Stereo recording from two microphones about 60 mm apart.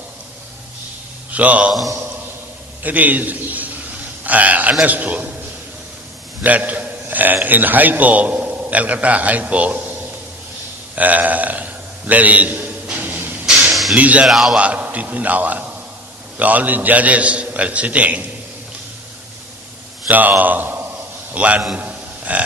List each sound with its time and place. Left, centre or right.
1.3 s speech: right
2.8 s a man's voice: right
6.4 s a man's voice: right
10.9 s a sound: right
13.9 s a man's voice: right
14.3 s a man's voice: centre
14.5 s a man's voice: right
20.1 s a man's voice: right
21.8 s a sound: right